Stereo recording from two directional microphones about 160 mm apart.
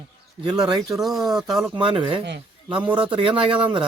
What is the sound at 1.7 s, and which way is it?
Speech, 30° right (ahead or behind).